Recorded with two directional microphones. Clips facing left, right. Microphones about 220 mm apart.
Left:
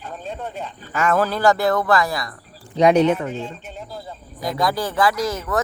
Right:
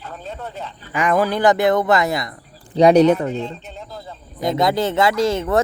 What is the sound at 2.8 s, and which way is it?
Speech, 35° right (ahead or behind).